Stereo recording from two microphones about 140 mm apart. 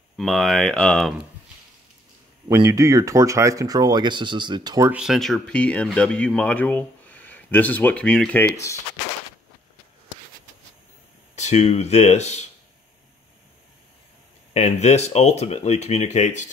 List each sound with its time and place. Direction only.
0.2 s speech: centre (ahead or behind)
2.4 s speech: 25° right (ahead or behind)
4.9 s speech: centre (ahead or behind)
8.5 s speech: 20° left (ahead or behind)
11.3 s speech: 55° left (ahead or behind)
14.5 s speech: 55° left (ahead or behind)